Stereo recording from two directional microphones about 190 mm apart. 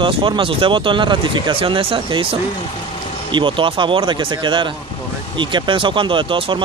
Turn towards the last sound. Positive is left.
turn(degrees=-25)  # may be behind; listen again after turning